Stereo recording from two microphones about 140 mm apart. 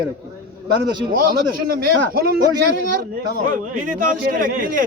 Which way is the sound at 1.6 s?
90° right.